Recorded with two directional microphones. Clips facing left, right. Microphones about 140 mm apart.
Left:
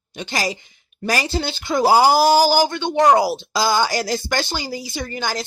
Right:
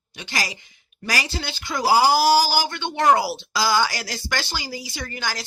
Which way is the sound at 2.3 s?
20° left (ahead or behind).